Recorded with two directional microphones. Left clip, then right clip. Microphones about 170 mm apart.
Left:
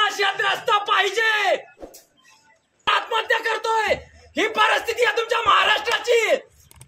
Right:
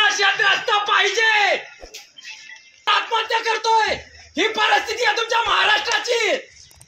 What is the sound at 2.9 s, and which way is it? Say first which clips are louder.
A man's voice: right 1 dB; 30° left (ahead or behind).